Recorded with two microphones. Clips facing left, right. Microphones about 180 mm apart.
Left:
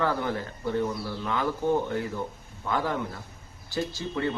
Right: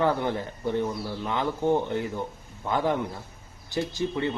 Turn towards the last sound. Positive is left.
turn(degrees=-20)  # may be behind; listen again after turning